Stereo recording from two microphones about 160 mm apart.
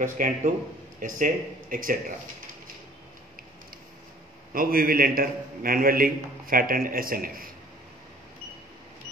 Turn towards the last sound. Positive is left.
turn(degrees=-65)  # may be behind; listen again after turning